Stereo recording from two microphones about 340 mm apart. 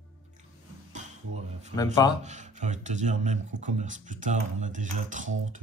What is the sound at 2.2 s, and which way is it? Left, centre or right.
Speech, right.